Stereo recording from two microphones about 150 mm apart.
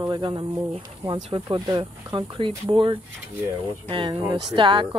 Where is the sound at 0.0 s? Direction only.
30° right (ahead or behind).